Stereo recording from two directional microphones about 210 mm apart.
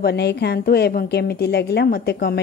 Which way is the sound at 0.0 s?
50° left (ahead or behind).